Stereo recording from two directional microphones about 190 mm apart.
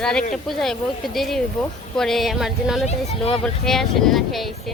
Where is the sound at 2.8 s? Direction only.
30° left (ahead or behind).